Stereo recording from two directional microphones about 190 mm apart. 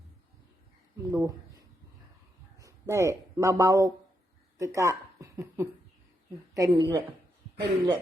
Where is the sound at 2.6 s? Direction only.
15° right (ahead or behind).